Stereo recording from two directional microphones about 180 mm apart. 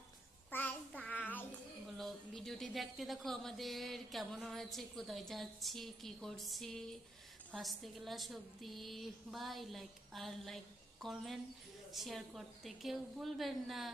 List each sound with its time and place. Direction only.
0.5 s child singing: 10° left (ahead or behind)
2.0 s speech: centre (ahead or behind)